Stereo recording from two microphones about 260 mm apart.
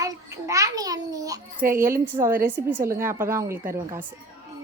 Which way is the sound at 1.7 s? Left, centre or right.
Right.